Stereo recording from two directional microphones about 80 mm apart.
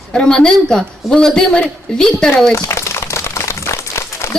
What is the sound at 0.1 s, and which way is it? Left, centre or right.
A woman's voice, centre.